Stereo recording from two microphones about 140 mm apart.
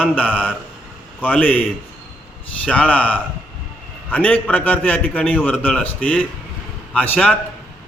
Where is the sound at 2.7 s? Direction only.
10° left (ahead or behind).